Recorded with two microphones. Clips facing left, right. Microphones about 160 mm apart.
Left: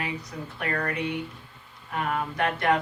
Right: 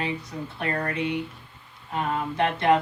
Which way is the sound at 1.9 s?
25° right (ahead or behind).